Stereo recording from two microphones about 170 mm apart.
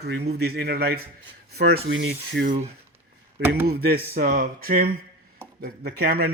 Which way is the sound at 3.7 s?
65° right (ahead or behind).